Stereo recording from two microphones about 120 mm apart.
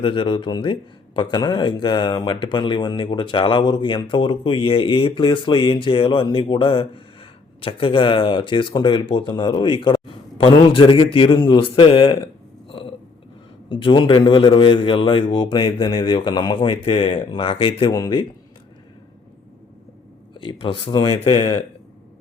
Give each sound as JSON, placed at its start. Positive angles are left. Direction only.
{"t": 0.0, "sound": "a man's voice", "side_deg": 45}
{"t": 12.2, "sound": "a sound", "side_deg": 50}
{"t": 13.7, "sound": "a man's voice", "side_deg": 45}
{"t": 20.4, "sound": "a man's voice", "side_deg": 40}